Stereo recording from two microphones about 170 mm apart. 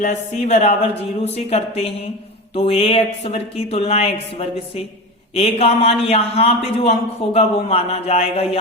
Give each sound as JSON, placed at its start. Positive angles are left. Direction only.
{"t": 0.0, "sound": "speech", "side_deg": 40}